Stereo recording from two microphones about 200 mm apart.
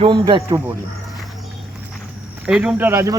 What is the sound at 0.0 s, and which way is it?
Speech, 25° right (ahead or behind).